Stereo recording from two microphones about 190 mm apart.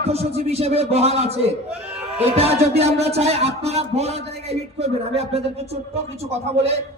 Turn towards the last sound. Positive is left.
turn(degrees=-35)  # may be behind; listen again after turning